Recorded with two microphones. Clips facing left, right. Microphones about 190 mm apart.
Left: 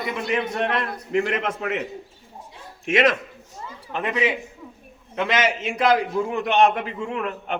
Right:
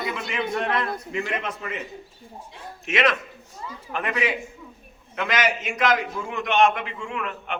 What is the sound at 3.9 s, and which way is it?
A man's voice, 20° left (ahead or behind).